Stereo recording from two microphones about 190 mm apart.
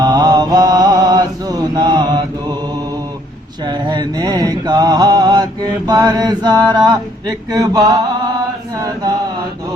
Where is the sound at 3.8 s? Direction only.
25° right (ahead or behind).